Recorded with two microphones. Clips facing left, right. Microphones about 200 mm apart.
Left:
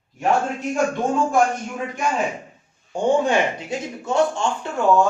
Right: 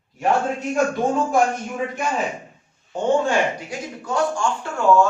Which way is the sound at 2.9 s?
20° left (ahead or behind).